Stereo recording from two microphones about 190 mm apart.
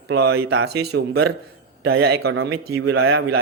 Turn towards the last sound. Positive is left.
turn(degrees=-90)